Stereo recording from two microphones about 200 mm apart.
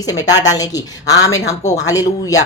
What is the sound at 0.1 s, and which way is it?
Speech, 20° left (ahead or behind).